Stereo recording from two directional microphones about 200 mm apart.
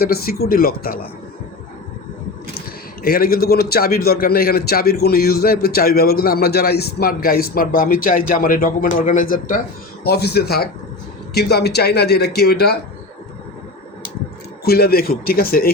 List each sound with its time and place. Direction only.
0.0 s a man's voice: 50° left (ahead or behind)
2.6 s a man's voice: 50° left (ahead or behind)
14.6 s a man's voice: 50° left (ahead or behind)